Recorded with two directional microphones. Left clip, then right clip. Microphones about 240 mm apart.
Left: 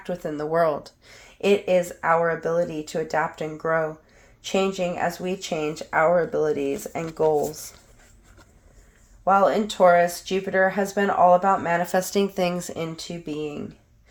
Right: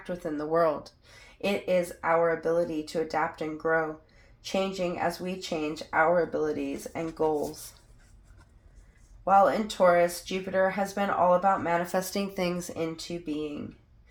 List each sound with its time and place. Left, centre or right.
0.0 s speech: left
9.2 s speech: left